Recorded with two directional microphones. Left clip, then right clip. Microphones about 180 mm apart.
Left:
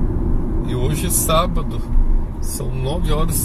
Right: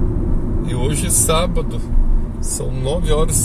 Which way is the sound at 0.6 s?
20° right (ahead or behind).